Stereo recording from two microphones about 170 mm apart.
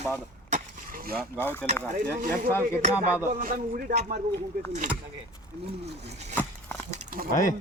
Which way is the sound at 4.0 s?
45° right (ahead or behind).